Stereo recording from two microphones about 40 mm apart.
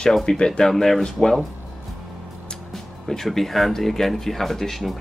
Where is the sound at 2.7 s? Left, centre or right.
Centre.